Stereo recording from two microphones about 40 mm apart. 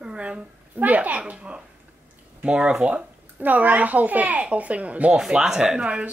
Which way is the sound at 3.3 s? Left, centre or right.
Right.